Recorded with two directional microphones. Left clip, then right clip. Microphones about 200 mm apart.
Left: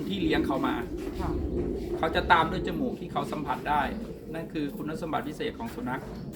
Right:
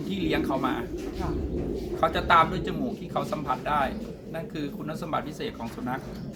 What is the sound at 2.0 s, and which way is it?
Speech, 15° right (ahead or behind).